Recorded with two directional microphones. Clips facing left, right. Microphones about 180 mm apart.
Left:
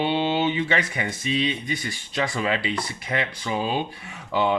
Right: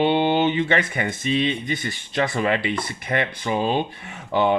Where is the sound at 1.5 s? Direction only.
25° right (ahead or behind).